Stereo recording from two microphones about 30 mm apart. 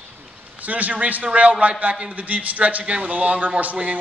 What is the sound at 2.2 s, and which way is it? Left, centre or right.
A man's voice, right.